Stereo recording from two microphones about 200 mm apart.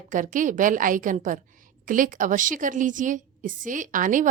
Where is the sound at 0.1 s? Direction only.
40° right (ahead or behind).